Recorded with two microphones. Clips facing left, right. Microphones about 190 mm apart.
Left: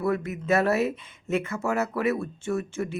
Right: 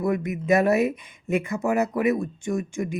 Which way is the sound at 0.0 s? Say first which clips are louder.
Right 2 dB; 15° right (ahead or behind).